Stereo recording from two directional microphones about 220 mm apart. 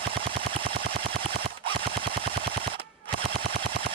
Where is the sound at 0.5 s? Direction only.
25° right (ahead or behind).